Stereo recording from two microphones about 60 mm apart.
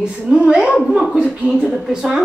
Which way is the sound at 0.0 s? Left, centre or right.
Centre.